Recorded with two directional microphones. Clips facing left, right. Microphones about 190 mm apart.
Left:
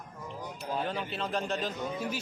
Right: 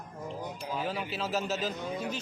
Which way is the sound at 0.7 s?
5° right (ahead or behind).